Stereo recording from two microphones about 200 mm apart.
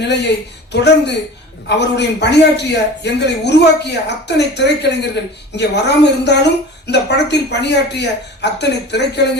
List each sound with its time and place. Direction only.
0.0 s a man's voice: 60° left (ahead or behind)